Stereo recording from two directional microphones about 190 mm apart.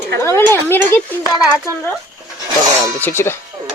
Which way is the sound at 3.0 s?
10° left (ahead or behind).